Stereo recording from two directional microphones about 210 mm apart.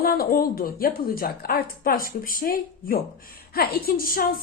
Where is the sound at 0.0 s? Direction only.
45° left (ahead or behind).